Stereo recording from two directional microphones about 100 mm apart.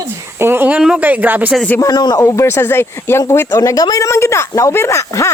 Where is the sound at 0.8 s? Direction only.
10° right (ahead or behind).